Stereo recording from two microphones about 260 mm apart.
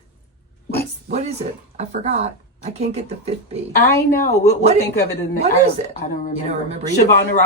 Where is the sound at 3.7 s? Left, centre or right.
Left.